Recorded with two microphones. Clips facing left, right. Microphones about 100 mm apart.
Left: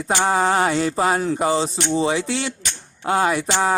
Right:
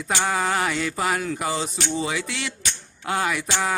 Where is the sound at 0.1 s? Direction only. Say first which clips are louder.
Left 5 dB; 30° left (ahead or behind).